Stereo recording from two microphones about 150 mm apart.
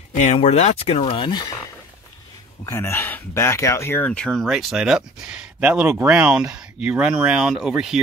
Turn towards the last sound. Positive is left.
turn(degrees=-5)  # may be behind; listen again after turning